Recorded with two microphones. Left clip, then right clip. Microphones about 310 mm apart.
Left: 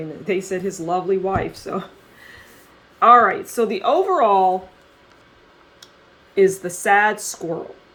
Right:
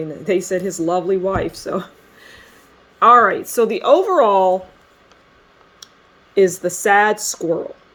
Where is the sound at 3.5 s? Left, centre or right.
Right.